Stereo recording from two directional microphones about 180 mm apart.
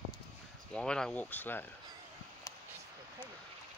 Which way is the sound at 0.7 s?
5° left (ahead or behind).